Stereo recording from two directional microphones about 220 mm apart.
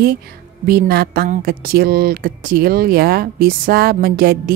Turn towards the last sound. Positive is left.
turn(degrees=-45)  # may be behind; listen again after turning